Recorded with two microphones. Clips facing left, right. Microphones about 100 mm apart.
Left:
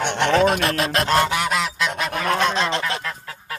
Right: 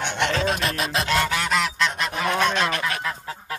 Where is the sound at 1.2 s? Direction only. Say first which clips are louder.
Left 3 dB; 20° left (ahead or behind).